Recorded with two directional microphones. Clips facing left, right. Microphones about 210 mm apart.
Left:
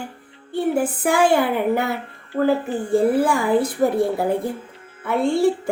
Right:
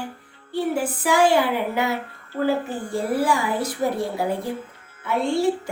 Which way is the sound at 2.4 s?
55° left (ahead or behind).